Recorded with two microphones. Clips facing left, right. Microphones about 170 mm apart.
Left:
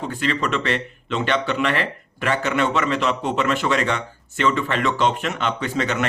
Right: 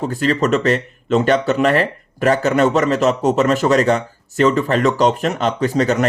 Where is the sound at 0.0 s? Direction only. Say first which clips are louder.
Right 6 dB; 40° right (ahead or behind).